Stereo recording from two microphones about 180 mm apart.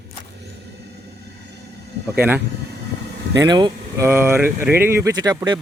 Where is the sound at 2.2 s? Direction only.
10° right (ahead or behind).